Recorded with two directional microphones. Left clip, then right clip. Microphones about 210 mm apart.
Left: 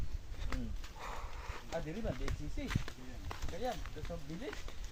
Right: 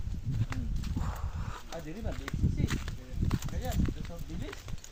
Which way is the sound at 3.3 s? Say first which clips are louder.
Even; 55° right (ahead or behind).